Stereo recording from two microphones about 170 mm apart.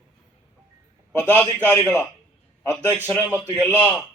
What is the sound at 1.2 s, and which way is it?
Speech, 10° left (ahead or behind).